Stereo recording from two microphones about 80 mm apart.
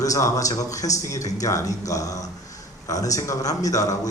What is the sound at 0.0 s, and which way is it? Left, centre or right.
A man's voice, left.